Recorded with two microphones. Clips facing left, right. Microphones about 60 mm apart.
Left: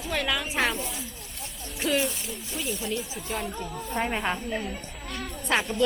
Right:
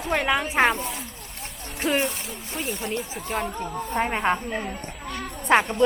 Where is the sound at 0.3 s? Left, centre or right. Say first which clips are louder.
Right 6 dB; right.